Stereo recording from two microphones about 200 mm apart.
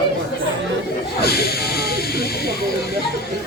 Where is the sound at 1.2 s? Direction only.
50° left (ahead or behind).